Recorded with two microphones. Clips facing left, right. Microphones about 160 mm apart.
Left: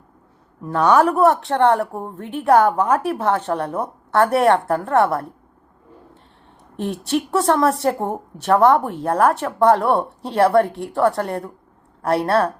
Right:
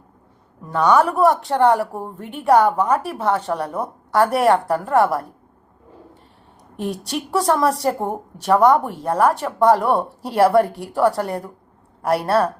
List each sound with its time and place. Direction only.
0.7 s a woman's voice: 5° left (ahead or behind)
6.7 s speech: centre (ahead or behind)